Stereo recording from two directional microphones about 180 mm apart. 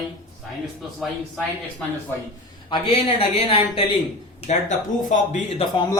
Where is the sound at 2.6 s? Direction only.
30° left (ahead or behind).